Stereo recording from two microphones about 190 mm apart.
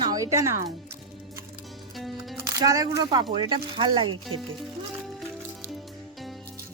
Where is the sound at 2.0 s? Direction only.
Centre (ahead or behind).